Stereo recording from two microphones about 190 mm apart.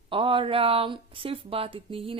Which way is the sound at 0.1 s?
25° right (ahead or behind).